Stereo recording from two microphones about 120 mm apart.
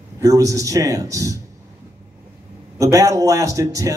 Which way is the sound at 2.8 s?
30° right (ahead or behind).